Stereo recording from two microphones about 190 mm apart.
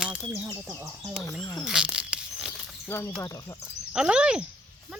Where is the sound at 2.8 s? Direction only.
15° left (ahead or behind).